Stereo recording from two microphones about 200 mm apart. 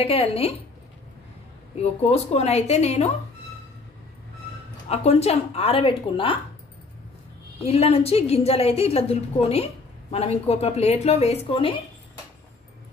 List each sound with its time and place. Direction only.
0.0 s speech: 30° left (ahead or behind)
1.8 s a woman's voice: 30° left (ahead or behind)
4.8 s speech: 30° left (ahead or behind)
7.6 s a woman's voice: 30° left (ahead or behind)